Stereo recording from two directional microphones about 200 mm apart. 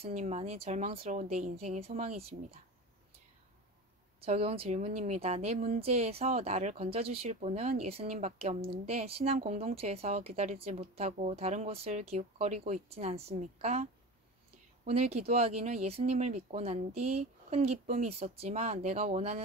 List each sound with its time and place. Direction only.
0.0 s a woman's voice: 35° right (ahead or behind)
4.2 s a woman's voice: 30° right (ahead or behind)
14.9 s a woman's voice: 30° right (ahead or behind)